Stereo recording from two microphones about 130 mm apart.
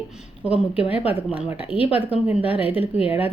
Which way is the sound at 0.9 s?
10° right (ahead or behind).